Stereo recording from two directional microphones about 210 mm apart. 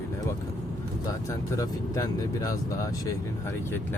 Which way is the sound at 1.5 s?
15° left (ahead or behind).